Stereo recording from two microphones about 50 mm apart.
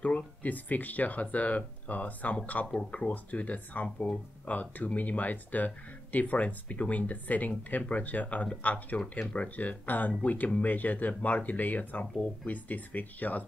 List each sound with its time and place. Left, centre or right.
0.0 s speech: left